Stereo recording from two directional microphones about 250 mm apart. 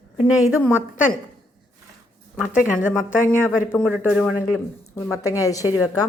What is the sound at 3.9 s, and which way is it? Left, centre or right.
Speech, centre.